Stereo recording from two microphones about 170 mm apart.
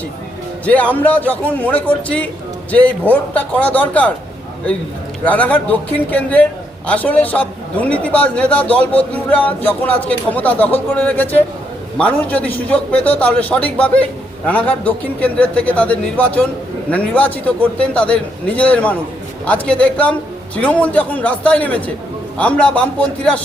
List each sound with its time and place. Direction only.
0.6 s a man's voice: 10° left (ahead or behind)
5.2 s a man's voice: 10° left (ahead or behind)